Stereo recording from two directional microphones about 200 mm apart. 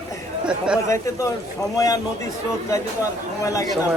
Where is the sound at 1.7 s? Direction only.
15° left (ahead or behind).